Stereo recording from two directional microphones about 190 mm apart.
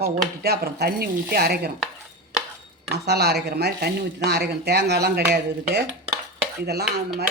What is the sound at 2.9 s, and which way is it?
Speech, 60° right (ahead or behind).